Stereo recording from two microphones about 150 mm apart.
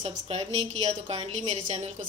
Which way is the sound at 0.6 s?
45° right (ahead or behind).